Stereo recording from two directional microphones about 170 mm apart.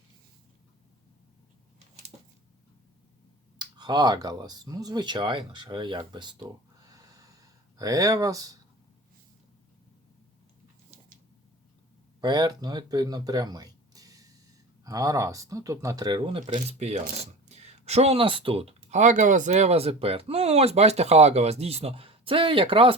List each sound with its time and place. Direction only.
3.6 s speech: 25° right (ahead or behind)
6.8 s snort: 20° right (ahead or behind)
7.8 s speech: 20° right (ahead or behind)
12.2 s speech: 25° right (ahead or behind)